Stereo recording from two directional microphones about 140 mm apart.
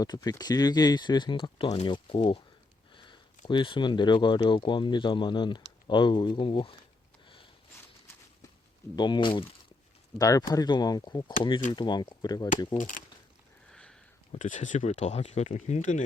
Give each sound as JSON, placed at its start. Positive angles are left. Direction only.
{"t": 0.0, "sound": "speech", "side_deg": 30}
{"t": 9.0, "sound": "speech", "side_deg": 35}
{"t": 10.2, "sound": "speech", "side_deg": 25}
{"t": 14.3, "sound": "speech", "side_deg": 60}